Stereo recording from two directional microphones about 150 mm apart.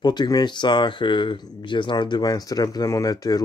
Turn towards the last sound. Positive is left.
turn(degrees=25)  # may be behind; listen again after turning